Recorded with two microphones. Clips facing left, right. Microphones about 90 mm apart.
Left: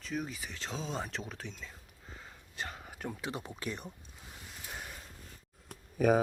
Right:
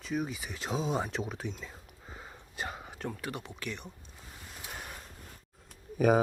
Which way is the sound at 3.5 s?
35° left (ahead or behind).